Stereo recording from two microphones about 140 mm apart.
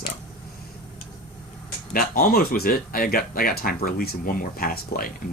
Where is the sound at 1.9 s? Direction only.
90° left.